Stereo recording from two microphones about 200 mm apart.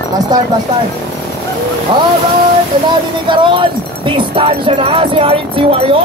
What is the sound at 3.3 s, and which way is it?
Speech, 25° right (ahead or behind).